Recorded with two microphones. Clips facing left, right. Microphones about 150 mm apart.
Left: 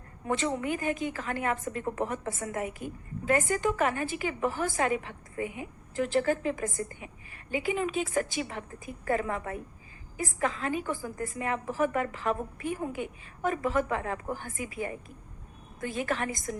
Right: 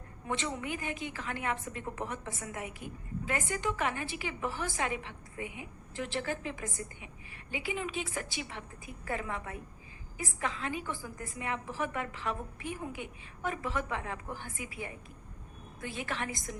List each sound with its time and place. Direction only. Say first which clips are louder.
0.3 s a woman's voice: left 6 dB; 45° left (ahead or behind)